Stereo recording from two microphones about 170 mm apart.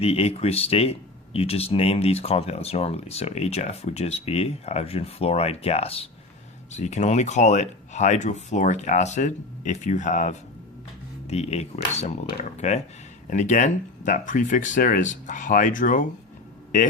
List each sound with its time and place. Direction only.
0.0 s speech: 35° left (ahead or behind)